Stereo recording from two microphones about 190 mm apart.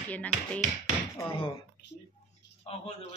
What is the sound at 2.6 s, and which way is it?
Speech, 30° left (ahead or behind).